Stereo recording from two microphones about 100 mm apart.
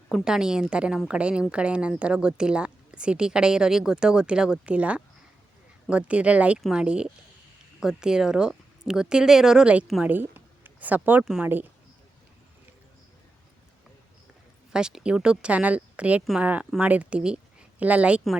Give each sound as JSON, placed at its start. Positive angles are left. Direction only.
{"t": 0.1, "sound": "a woman's voice", "side_deg": -5}
{"t": 14.7, "sound": "a woman's voice", "side_deg": -5}